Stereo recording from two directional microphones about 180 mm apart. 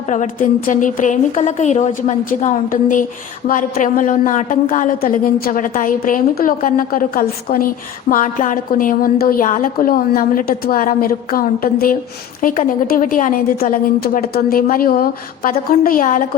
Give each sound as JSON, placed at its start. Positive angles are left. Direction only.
{"t": 0.1, "sound": "a woman's voice", "side_deg": 45}